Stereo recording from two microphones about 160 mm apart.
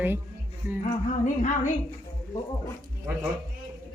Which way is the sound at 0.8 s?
50° left (ahead or behind).